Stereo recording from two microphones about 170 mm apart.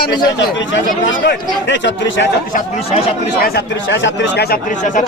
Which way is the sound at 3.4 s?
80° left.